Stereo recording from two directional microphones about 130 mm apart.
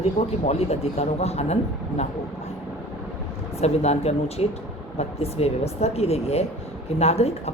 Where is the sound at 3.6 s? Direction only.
55° left (ahead or behind).